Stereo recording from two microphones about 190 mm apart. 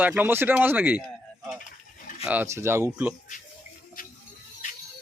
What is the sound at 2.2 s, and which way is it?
Speech, 10° right (ahead or behind).